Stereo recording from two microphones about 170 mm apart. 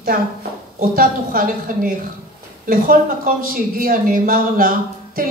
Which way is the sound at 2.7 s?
55° right (ahead or behind).